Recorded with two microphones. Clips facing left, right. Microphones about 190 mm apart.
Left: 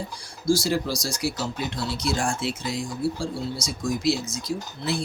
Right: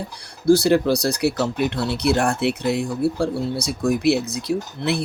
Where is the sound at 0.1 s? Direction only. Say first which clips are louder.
Right 8 dB; 65° right (ahead or behind).